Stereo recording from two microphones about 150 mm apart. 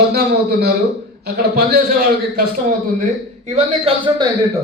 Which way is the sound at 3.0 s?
45° right (ahead or behind).